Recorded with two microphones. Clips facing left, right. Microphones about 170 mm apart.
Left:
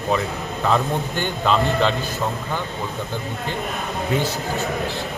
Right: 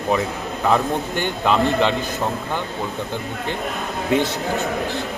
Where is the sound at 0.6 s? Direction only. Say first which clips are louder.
Right 2 dB; 15° right (ahead or behind).